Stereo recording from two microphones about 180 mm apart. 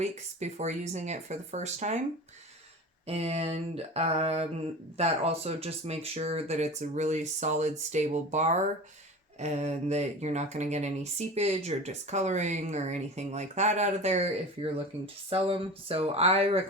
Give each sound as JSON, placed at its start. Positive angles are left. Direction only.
{"t": 0.0, "sound": "speech", "side_deg": -40}
{"t": 3.1, "sound": "speech", "side_deg": -35}